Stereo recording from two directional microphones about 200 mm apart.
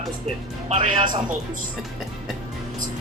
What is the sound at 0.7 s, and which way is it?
Speech, 25° right (ahead or behind).